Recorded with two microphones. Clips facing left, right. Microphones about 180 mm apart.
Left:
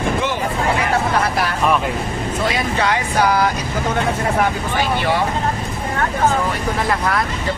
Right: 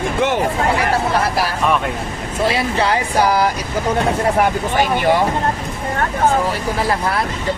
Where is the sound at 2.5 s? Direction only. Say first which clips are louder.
Right 3 dB; 30° right (ahead or behind).